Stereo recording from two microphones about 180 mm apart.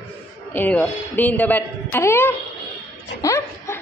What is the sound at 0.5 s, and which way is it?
A man's voice, 10° left (ahead or behind).